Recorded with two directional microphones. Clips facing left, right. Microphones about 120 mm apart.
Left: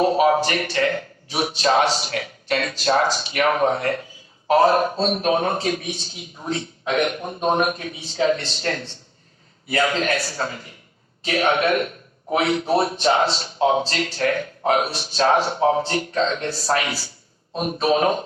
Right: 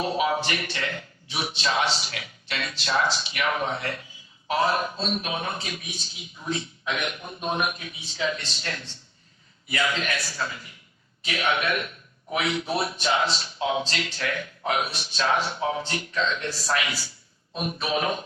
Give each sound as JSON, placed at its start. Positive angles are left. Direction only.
{"t": 0.0, "sound": "a man's voice", "side_deg": 45}